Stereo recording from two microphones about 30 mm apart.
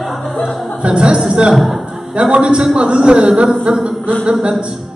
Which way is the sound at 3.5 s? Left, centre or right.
Right.